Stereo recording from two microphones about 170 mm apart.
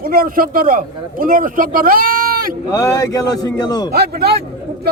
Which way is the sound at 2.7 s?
20° left (ahead or behind).